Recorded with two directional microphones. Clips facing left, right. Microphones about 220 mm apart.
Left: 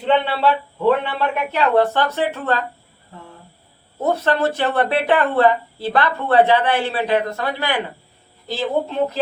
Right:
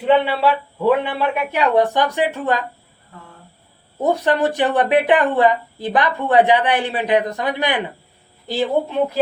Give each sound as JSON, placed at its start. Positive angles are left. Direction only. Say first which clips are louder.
{"t": 0.0, "sound": "a woman's voice", "louder": "right 2 dB", "side_deg": -10}
{"t": 3.1, "sound": "speech", "louder": "left 2 dB", "side_deg": 25}
{"t": 4.0, "sound": "a woman's voice", "louder": "right 1 dB", "side_deg": -15}